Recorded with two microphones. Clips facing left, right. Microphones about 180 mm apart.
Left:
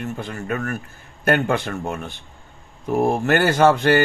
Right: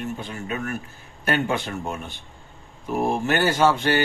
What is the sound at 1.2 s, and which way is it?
Speech, 55° left (ahead or behind).